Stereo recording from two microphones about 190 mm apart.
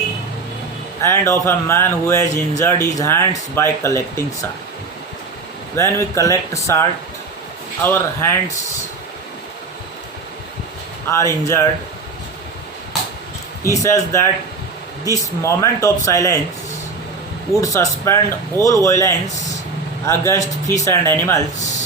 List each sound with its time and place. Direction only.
1.0 s speech: 15° left (ahead or behind)
5.7 s speech: 15° left (ahead or behind)
11.1 s speech: 15° left (ahead or behind)
13.7 s speech: 15° left (ahead or behind)
17.6 s speech: 15° left (ahead or behind)